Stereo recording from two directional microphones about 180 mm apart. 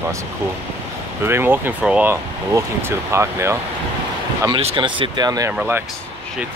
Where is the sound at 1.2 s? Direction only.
10° right (ahead or behind).